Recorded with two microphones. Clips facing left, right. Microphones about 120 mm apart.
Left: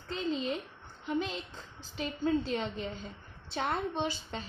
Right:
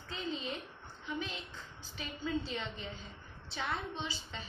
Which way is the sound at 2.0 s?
45° left (ahead or behind).